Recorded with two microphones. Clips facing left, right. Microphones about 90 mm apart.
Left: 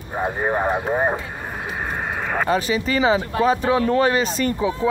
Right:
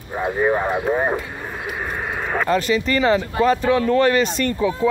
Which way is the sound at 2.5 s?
10° left (ahead or behind).